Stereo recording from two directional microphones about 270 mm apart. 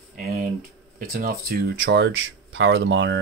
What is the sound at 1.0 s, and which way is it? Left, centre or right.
Speech, right.